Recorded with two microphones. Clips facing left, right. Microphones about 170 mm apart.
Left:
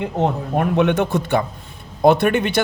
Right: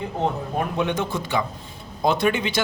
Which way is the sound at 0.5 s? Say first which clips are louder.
Left 7 dB; 65° left (ahead or behind).